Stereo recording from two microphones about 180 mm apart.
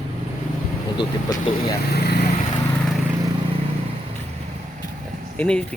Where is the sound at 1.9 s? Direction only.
60° left (ahead or behind).